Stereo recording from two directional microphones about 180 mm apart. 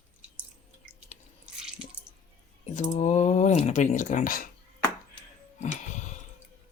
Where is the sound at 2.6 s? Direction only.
40° left (ahead or behind).